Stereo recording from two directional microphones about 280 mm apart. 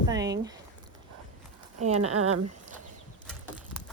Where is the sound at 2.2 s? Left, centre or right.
Right.